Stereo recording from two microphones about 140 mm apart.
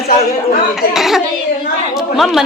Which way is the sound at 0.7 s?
Centre (ahead or behind).